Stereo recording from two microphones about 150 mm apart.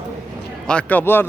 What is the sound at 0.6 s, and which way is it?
Speech, 10° left (ahead or behind).